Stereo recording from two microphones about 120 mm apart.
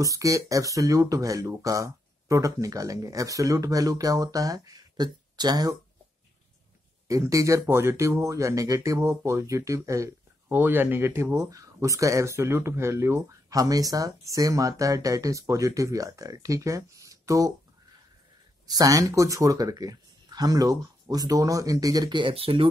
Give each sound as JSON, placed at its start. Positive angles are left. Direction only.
{"t": 0.0, "sound": "speech", "side_deg": -30}
{"t": 7.1, "sound": "speech", "side_deg": -25}
{"t": 18.7, "sound": "speech", "side_deg": -30}